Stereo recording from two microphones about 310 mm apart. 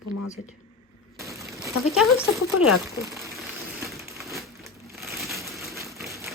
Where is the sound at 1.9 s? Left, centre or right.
Centre.